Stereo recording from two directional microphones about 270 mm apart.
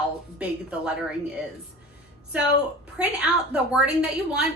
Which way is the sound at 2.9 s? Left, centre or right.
Centre.